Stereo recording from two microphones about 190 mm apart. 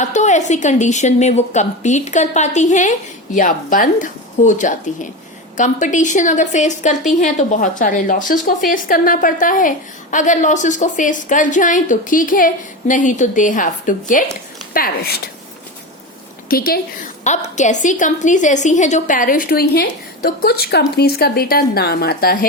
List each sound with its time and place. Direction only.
0.0 s a woman's voice: 40° left (ahead or behind)
16.5 s a woman's voice: 50° left (ahead or behind)